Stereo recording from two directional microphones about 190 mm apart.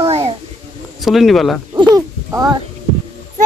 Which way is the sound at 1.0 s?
Centre (ahead or behind).